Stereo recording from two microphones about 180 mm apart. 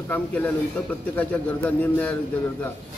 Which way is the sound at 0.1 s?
10° left (ahead or behind).